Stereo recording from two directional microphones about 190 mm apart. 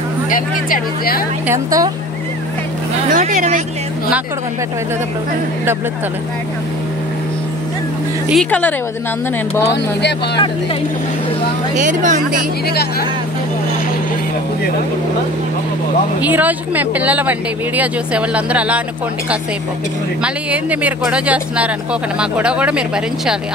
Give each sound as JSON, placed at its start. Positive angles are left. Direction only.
{"t": 0.3, "sound": "speech", "side_deg": 50}
{"t": 1.5, "sound": "speech", "side_deg": -20}
{"t": 3.1, "sound": "speech", "side_deg": -45}
{"t": 8.3, "sound": "speech", "side_deg": 5}
{"t": 11.7, "sound": "speech", "side_deg": -40}
{"t": 16.2, "sound": "speech", "side_deg": -10}
{"t": 20.8, "sound": "speech", "side_deg": -5}